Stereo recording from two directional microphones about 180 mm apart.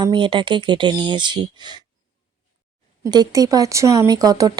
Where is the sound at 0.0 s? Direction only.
25° right (ahead or behind).